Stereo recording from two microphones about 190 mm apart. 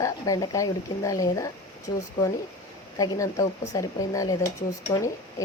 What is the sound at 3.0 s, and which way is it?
Speech, 15° left (ahead or behind).